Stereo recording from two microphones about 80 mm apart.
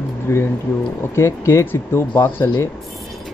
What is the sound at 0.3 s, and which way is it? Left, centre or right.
A man's voice, left.